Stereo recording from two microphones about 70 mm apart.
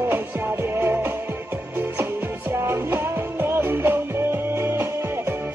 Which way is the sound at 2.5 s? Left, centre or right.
Right.